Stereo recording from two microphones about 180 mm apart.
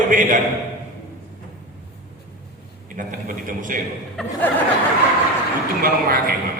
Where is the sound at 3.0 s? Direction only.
45° right (ahead or behind).